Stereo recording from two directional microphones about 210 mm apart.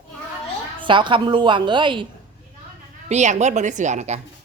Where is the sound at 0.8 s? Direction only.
25° right (ahead or behind).